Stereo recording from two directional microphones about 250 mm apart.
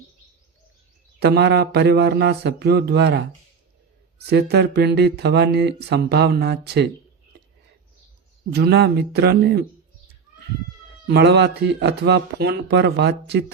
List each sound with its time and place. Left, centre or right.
1.2 s speech: right
4.3 s speech: right
8.4 s speech: right
11.0 s speech: right